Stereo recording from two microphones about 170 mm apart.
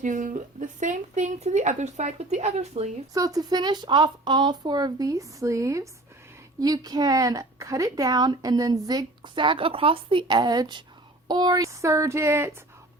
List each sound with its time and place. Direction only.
0.0 s speech: 50° right (ahead or behind)
3.2 s speech: 20° right (ahead or behind)